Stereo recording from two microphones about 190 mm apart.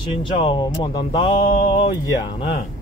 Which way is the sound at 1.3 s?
45° left (ahead or behind).